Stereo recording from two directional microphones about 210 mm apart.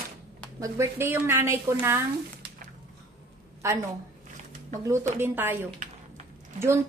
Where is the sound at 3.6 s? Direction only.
15° right (ahead or behind).